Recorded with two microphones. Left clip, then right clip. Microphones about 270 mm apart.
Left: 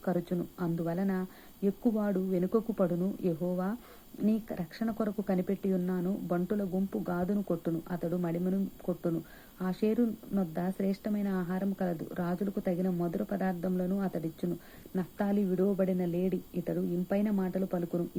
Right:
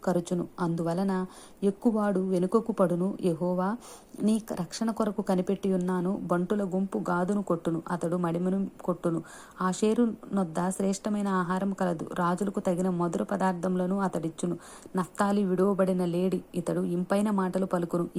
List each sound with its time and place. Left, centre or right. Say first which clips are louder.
0.0 s a woman's voice: right 4 dB; right